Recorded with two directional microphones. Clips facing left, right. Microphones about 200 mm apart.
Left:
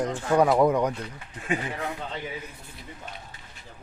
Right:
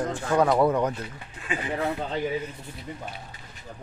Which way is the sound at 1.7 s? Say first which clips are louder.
Right 5 dB; 35° right (ahead or behind).